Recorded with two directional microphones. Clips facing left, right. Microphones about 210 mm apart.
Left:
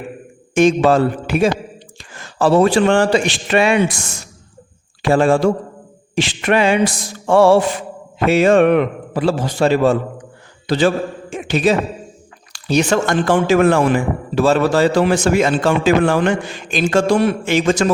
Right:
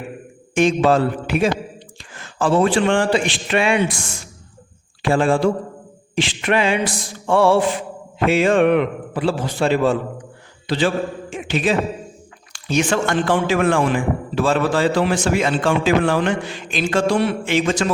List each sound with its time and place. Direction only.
0.5 s a man's voice: 45° left (ahead or behind)
5.0 s a man's voice: 45° left (ahead or behind)